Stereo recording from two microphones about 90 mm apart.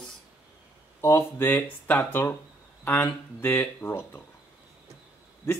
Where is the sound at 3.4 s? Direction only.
25° left (ahead or behind).